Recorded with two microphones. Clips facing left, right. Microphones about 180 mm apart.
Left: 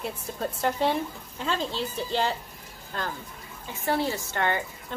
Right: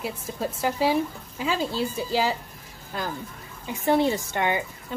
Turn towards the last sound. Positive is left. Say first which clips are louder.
# right 2 dB
turn(degrees=-15)  # may be behind; listen again after turning